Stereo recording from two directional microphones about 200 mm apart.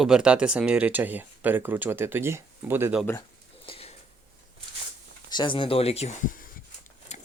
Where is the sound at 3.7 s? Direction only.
30° left (ahead or behind).